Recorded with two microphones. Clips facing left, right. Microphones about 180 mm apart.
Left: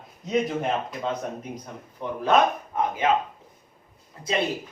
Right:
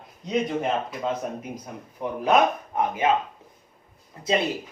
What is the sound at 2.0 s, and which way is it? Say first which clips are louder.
Speech: right 1 dB; 10° right (ahead or behind).